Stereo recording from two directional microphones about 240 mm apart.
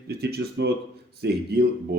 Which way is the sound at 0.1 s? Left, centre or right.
Right.